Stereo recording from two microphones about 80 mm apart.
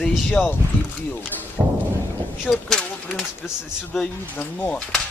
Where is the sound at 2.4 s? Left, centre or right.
Centre.